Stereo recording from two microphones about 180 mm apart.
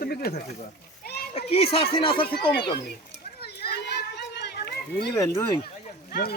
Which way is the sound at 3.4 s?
60° left (ahead or behind).